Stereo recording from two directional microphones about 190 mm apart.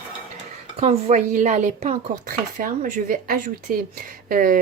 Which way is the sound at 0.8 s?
35° right (ahead or behind).